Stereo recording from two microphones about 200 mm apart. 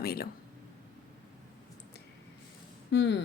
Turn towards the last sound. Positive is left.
turn(degrees=65)  # may be behind; listen again after turning